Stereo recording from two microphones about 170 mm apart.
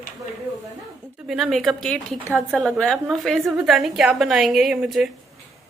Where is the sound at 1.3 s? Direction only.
Centre (ahead or behind).